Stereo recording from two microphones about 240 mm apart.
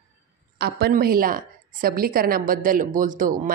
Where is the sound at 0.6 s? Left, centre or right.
Right.